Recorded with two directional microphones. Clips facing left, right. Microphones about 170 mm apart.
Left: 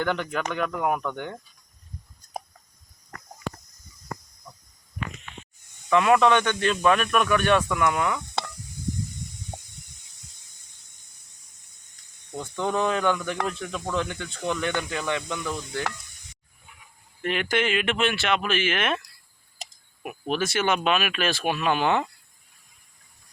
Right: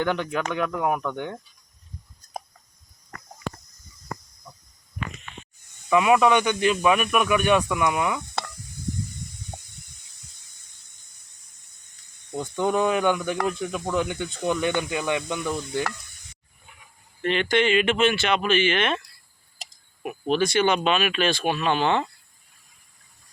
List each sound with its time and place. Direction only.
0.3 s speech: 5° right (ahead or behind)
5.9 s speech: 10° right (ahead or behind)
12.3 s speech: 15° right (ahead or behind)
17.2 s speech: 5° left (ahead or behind)